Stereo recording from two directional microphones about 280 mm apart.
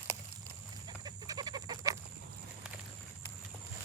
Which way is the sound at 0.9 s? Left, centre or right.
Centre.